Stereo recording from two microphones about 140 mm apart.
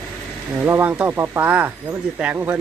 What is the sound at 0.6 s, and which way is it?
Speech, 15° right (ahead or behind).